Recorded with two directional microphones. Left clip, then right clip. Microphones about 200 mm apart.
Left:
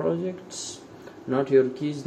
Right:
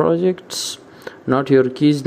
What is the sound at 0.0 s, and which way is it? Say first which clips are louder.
Speech: right 10 dB; 50° right (ahead or behind).